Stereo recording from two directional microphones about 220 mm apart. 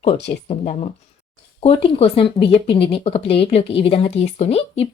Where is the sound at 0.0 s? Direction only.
30° left (ahead or behind).